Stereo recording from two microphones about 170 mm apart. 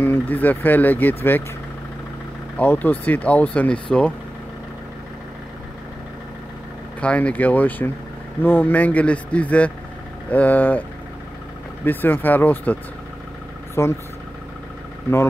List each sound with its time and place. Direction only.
0.0 s speech: 10° left (ahead or behind)
2.5 s speech: 10° left (ahead or behind)
7.0 s speech: 5° left (ahead or behind)
11.8 s speech: 10° left (ahead or behind)
13.8 s speech: 15° left (ahead or behind)